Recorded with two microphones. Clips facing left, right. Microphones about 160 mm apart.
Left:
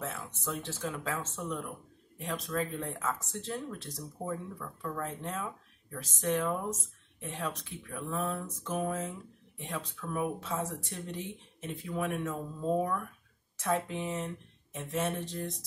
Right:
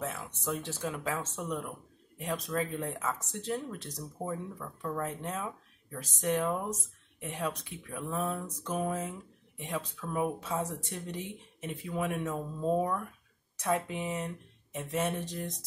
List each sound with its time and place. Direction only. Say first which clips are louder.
0.0 s speech: right 2 dB; 15° right (ahead or behind)
13.6 s speech: even; 15° right (ahead or behind)